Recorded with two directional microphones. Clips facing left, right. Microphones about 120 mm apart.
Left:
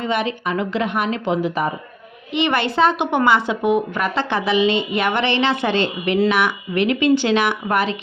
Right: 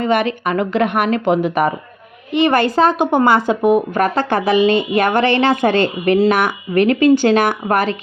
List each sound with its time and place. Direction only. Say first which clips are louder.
0.0 s speech: right 5 dB; 55° right (ahead or behind)
2.3 s a woman's voice: right 5 dB; 45° right (ahead or behind)